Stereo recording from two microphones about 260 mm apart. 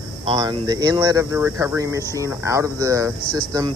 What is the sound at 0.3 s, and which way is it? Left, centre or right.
Speech, centre.